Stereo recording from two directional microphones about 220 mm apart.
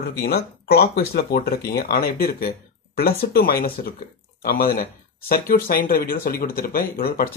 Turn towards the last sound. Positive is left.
turn(degrees=40)  # may be behind; listen again after turning